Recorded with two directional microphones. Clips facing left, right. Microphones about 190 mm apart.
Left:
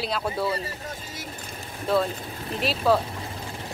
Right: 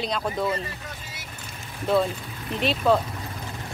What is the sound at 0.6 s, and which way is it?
Vehicle, 40° left (ahead or behind).